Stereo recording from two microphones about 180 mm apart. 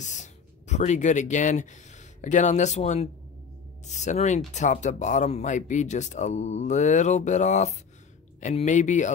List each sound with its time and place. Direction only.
0.0 s speech: 40° left (ahead or behind)